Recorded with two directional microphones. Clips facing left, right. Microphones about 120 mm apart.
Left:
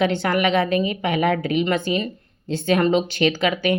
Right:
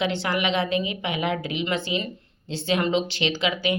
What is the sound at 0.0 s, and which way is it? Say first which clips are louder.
Speech: left 5 dB; 50° left (ahead or behind).